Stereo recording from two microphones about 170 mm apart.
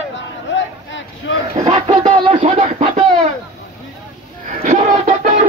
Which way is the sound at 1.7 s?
25° right (ahead or behind).